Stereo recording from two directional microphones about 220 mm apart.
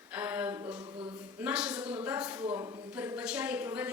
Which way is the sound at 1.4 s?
5° right (ahead or behind).